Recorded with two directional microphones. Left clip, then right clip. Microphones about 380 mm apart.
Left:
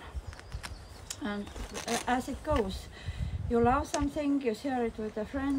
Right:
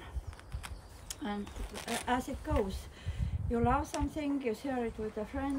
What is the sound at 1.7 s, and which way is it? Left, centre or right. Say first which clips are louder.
Speech: left 5 dB; left.